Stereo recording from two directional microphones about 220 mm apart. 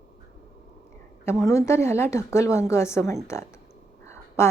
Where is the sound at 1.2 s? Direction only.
10° left (ahead or behind).